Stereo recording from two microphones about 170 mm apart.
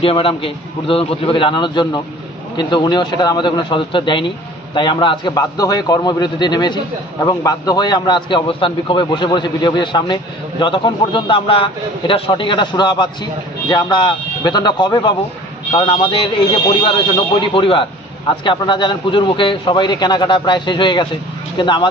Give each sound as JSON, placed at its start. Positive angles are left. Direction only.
{"t": 0.0, "sound": "a man's voice", "side_deg": 30}